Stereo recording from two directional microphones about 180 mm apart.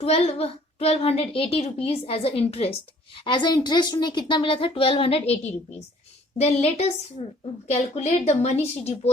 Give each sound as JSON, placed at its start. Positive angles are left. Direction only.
{"t": 0.0, "sound": "a child's voice", "side_deg": 35}